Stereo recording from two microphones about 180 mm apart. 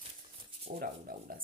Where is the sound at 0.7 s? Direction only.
50° right (ahead or behind).